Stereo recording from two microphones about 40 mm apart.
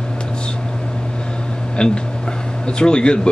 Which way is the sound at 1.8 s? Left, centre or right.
Left.